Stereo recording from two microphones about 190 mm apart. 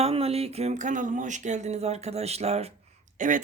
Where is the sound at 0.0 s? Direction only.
30° right (ahead or behind).